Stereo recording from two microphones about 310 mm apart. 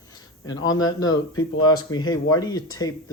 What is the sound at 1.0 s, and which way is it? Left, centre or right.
Speech, left.